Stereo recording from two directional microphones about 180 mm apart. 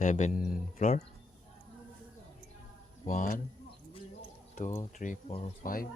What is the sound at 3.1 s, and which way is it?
Speech, 45° left (ahead or behind).